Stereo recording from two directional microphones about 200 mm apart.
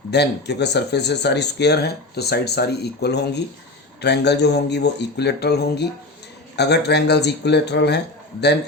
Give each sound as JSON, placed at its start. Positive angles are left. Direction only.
{"t": 0.1, "sound": "speech", "side_deg": 55}